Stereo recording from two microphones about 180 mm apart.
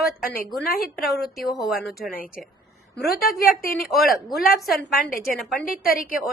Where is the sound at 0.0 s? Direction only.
50° left (ahead or behind).